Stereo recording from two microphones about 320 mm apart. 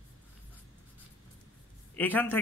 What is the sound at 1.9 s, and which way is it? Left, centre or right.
Speech, centre.